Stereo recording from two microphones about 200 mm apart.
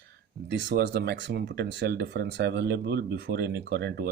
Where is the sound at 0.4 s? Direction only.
60° right (ahead or behind).